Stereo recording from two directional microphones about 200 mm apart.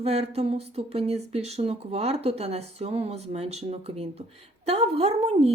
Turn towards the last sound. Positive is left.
turn(degrees=-30)  # may be behind; listen again after turning